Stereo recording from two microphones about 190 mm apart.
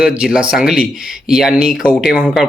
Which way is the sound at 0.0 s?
5° right (ahead or behind).